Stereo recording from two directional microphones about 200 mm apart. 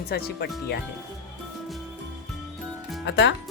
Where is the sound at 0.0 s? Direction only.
50° left (ahead or behind).